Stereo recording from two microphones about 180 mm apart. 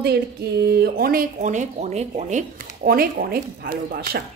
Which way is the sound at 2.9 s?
55° right (ahead or behind).